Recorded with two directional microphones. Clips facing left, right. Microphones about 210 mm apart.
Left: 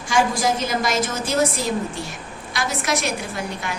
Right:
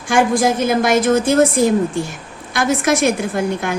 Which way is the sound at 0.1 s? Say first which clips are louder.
Right 5 dB; 55° right (ahead or behind).